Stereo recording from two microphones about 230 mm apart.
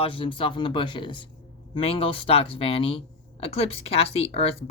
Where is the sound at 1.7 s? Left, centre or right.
Left.